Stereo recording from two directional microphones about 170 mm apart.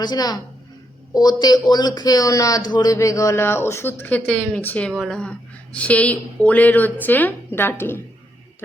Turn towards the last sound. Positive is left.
turn(degrees=15)  # may be behind; listen again after turning